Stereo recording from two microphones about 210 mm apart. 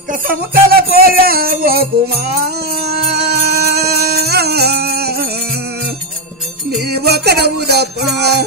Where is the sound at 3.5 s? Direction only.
50° right (ahead or behind).